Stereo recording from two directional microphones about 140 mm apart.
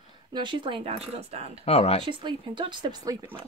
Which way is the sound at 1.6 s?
45° left (ahead or behind).